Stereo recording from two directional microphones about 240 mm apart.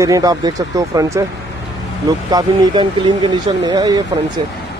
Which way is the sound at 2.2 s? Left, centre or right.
Centre.